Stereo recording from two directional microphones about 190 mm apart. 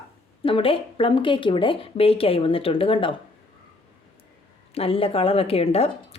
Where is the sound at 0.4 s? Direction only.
30° left (ahead or behind).